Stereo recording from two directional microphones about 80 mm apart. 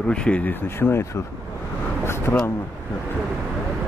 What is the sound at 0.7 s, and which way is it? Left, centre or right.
Speech, left.